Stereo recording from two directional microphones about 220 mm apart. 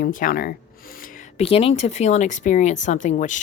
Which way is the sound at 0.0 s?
40° left (ahead or behind).